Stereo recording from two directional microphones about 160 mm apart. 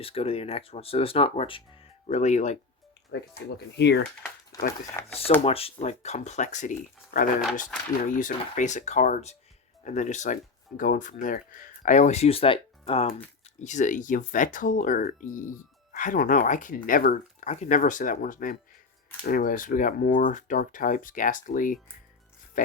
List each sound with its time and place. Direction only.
0.0 s speech: 35° left (ahead or behind)
2.0 s speech: 45° left (ahead or behind)
3.1 s speech: 90° left
4.5 s speech: 20° left (ahead or behind)
5.0 s speech: 40° left (ahead or behind); by 7.3 s 55° left (ahead or behind)
7.7 s speech: 5° left (ahead or behind)
8.1 s speech: 55° left (ahead or behind); by 13.2 s 35° left (ahead or behind)
13.6 s speech: 50° left (ahead or behind)